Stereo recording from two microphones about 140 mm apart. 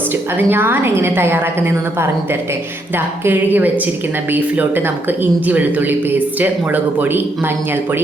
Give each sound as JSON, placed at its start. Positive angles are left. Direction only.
{"t": 0.1, "sound": "a woman's voice", "side_deg": -15}